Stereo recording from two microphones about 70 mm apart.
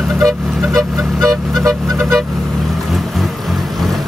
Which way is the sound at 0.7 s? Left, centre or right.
Right.